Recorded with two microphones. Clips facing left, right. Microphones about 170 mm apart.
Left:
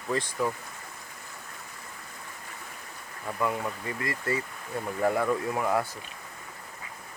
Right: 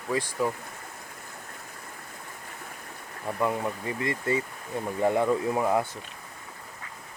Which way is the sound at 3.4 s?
20° right (ahead or behind).